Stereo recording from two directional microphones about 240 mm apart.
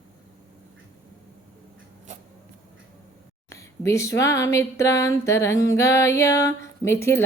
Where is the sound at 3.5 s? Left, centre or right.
Centre.